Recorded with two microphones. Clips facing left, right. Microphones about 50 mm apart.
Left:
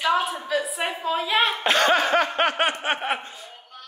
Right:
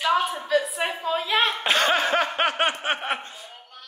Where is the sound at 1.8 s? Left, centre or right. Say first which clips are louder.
Left 3 dB; centre.